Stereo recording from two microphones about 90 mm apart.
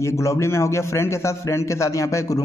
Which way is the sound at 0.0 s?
35° left (ahead or behind).